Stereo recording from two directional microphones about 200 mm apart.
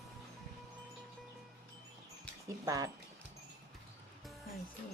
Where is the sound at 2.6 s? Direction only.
15° right (ahead or behind).